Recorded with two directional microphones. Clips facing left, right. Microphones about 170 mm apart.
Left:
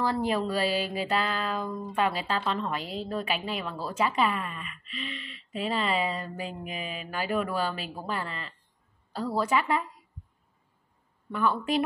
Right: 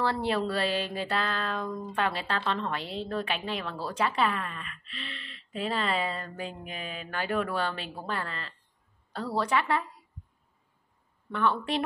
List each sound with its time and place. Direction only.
0.0 s music: 10° left (ahead or behind)
2.9 s a woman's voice: 5° left (ahead or behind)
9.1 s music: 10° left (ahead or behind)
11.3 s a woman's voice: 5° left (ahead or behind)